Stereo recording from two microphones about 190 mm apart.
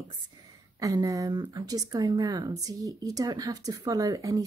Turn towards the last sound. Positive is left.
turn(degrees=-20)  # may be behind; listen again after turning